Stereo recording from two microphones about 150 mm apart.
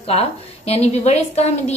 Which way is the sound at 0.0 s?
40° left (ahead or behind).